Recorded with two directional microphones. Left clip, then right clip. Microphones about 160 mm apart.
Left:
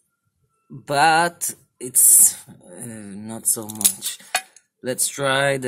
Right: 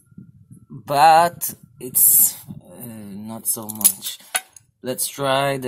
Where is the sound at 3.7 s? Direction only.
5° left (ahead or behind).